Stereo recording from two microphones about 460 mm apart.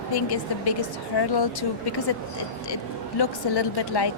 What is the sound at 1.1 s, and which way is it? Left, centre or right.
Speech, left.